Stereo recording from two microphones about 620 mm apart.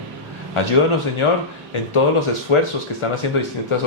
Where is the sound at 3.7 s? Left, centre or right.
Left.